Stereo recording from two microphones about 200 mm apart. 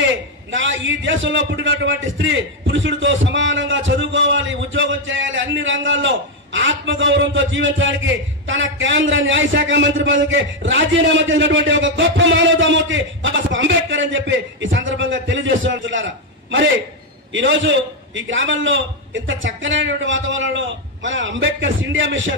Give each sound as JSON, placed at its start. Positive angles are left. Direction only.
{"t": 0.5, "sound": "a man's voice", "side_deg": -70}